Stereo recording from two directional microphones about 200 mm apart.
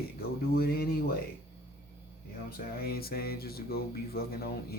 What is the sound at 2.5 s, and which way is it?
Speech, 50° left (ahead or behind).